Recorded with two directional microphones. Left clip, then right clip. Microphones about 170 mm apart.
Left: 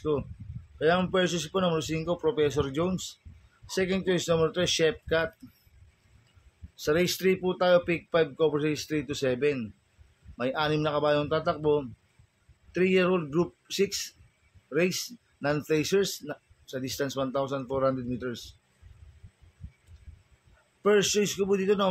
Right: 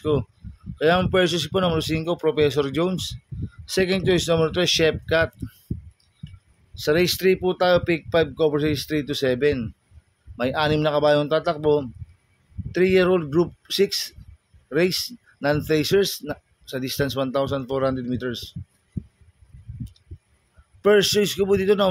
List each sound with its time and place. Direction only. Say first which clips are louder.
0.7 s speech: right 6 dB; 55° right (ahead or behind)
6.7 s speech: right 6 dB; 50° right (ahead or behind)
20.8 s speech: right 6 dB; 45° right (ahead or behind)